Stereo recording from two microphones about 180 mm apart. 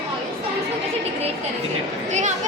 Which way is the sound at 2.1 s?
40° right (ahead or behind).